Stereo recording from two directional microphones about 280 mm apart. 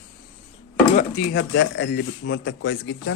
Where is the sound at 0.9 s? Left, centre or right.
Left.